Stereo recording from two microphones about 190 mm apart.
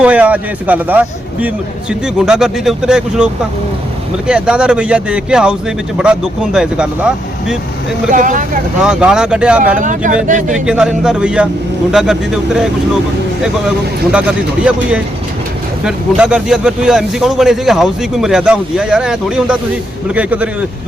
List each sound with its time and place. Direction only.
0.0 s a man's voice: 5° right (ahead or behind)
4.3 s a man's voice: 5° right (ahead or behind)
8.1 s speech: 45° right (ahead or behind)
8.8 s a man's voice: 5° right (ahead or behind)
9.7 s speech: 40° right (ahead or behind)
10.5 s a man's voice: 5° right (ahead or behind)